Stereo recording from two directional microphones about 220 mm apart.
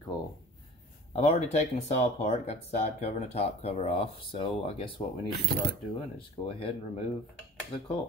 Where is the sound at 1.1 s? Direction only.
30° left (ahead or behind).